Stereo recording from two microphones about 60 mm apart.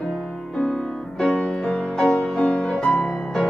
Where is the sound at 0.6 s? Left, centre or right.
Centre.